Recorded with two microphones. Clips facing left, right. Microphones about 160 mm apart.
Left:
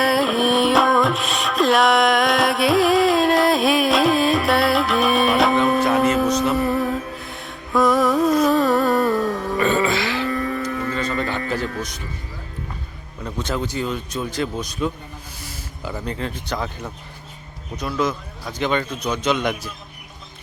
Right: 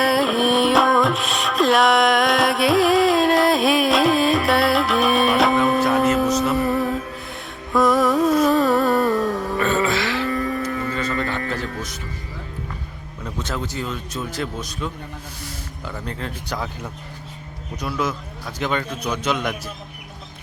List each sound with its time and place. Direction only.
0.0 s music: centre (ahead or behind)
11.0 s a sound: 25° left (ahead or behind)
13.4 s a man's voice: centre (ahead or behind)
15.4 s music: centre (ahead or behind)
16.5 s a man's voice: 5° right (ahead or behind)